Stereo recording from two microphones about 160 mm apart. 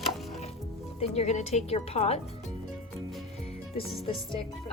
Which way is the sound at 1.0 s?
45° left (ahead or behind).